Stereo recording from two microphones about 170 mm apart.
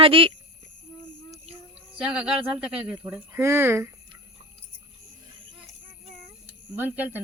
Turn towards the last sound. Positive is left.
turn(degrees=-10)  # may be behind; listen again after turning